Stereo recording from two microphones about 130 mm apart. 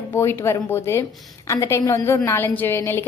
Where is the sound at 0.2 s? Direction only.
20° left (ahead or behind).